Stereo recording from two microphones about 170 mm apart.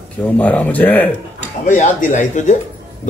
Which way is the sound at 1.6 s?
45° left (ahead or behind).